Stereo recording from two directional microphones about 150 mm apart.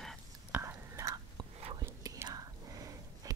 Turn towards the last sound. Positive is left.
turn(degrees=-25)  # may be behind; listen again after turning